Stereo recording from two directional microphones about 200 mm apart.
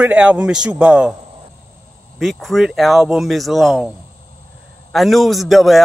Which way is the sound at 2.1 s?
Centre (ahead or behind).